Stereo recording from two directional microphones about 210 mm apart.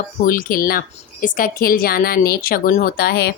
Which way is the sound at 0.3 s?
40° left (ahead or behind).